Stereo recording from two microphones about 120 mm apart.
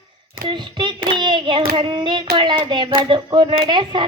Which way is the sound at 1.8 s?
40° right (ahead or behind).